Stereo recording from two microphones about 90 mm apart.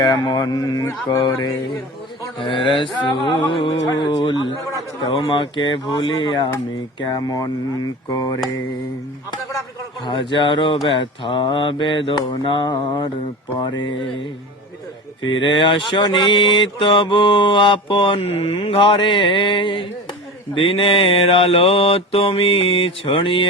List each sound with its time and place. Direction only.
0.0 s speech: 55° left (ahead or behind)
2.4 s mantra: 65° left (ahead or behind)
7.1 s speech: 50° left (ahead or behind)
10.1 s mantra: 65° left (ahead or behind)
13.6 s mantra: 60° left (ahead or behind)
15.3 s mantra: 60° left (ahead or behind)
20.6 s mantra: 90° left